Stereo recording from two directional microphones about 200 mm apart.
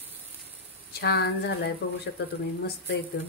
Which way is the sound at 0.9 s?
55° left (ahead or behind).